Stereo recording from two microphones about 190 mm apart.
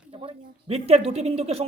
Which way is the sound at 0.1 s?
30° right (ahead or behind).